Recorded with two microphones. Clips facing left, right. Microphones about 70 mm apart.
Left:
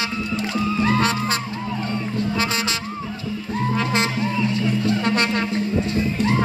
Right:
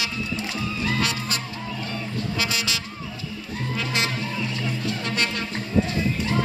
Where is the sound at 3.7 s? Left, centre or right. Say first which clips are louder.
Left 3 dB; left.